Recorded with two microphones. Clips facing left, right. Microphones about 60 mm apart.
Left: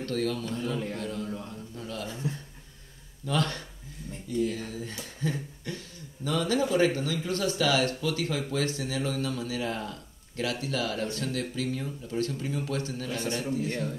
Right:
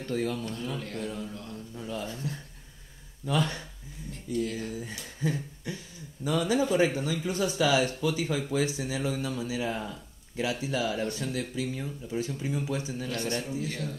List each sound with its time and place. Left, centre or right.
0.0 s a man's voice: centre
1.8 s a sound: centre
2.0 s a sound: left
3.3 s a man's voice: centre
5.7 s a sound: centre
6.2 s a man's voice: centre
13.1 s a man's voice: centre
13.4 s a man's voice: centre
13.7 s a man's voice: left